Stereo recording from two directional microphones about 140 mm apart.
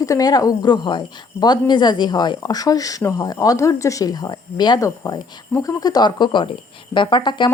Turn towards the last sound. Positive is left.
turn(degrees=35)  # may be behind; listen again after turning